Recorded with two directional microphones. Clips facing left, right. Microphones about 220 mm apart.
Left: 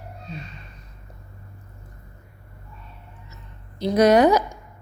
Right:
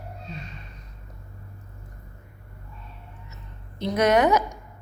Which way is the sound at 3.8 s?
35° left (ahead or behind).